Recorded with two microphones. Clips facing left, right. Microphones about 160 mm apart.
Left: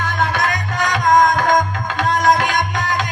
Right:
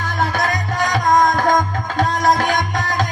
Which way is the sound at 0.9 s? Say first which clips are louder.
Left 2 dB; 35° right (ahead or behind).